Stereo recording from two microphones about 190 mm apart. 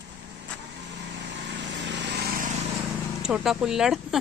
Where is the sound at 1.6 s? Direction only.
65° right (ahead or behind).